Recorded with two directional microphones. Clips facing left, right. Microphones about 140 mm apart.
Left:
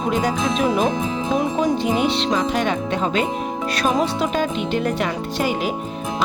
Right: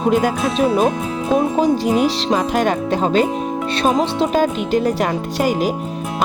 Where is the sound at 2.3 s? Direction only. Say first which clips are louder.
Right 3 dB; 50° right (ahead or behind).